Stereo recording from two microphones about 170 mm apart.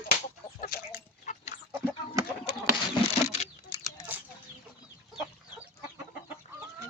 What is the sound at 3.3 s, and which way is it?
Patter, 40° left (ahead or behind).